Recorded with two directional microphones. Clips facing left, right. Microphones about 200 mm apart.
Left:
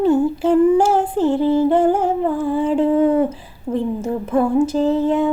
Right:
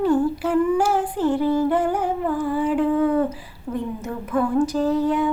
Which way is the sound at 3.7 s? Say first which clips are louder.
Left 7 dB; 30° left (ahead or behind).